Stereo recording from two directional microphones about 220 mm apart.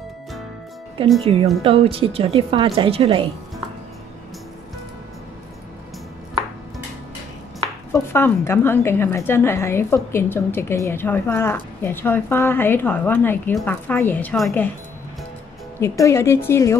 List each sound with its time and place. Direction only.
1.0 s a woman's voice: 25° right (ahead or behind)
7.9 s a woman's voice: 10° left (ahead or behind)
15.8 s a woman's voice: 15° left (ahead or behind)